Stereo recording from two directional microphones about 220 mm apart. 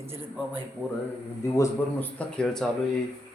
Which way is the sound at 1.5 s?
10° left (ahead or behind).